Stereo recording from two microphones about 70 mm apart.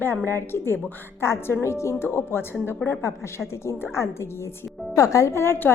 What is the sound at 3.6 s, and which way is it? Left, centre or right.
A woman's voice, left.